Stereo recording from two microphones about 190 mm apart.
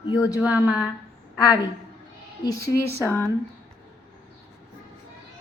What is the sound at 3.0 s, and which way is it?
Speech, 10° left (ahead or behind).